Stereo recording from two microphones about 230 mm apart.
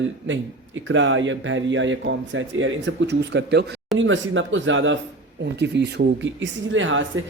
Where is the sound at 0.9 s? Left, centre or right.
Right.